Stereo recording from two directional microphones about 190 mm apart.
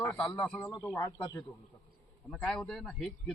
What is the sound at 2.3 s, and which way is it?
A man's voice, 5° left (ahead or behind).